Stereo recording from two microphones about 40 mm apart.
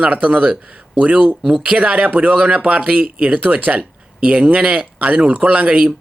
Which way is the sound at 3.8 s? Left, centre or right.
Right.